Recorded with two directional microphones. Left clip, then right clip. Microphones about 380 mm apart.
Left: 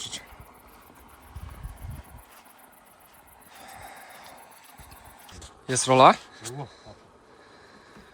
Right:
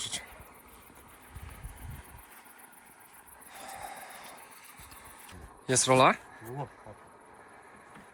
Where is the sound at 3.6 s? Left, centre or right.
Centre.